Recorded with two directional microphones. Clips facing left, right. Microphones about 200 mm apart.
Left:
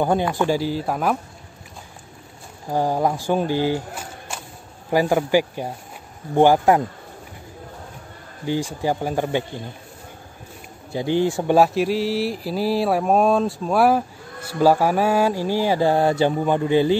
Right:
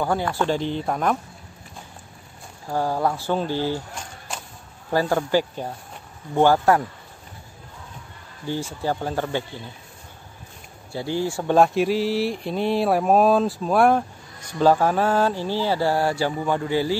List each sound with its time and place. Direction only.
0.0 s speech: 20° left (ahead or behind)
2.7 s speech: 15° left (ahead or behind)
8.5 s speech: 15° left (ahead or behind)
10.9 s speech: 20° left (ahead or behind)
11.5 s mantra: centre (ahead or behind)
14.5 s speech: 10° left (ahead or behind)